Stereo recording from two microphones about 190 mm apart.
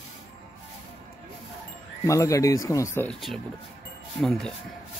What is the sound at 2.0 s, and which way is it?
Speech, 15° left (ahead or behind).